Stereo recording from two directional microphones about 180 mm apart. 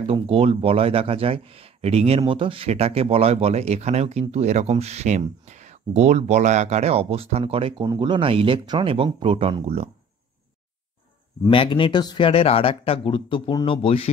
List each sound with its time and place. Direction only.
0.0 s speech: 35° right (ahead or behind)
11.4 s speech: 30° left (ahead or behind)